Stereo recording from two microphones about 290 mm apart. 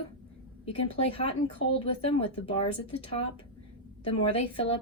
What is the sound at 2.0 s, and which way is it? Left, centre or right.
Speech, centre.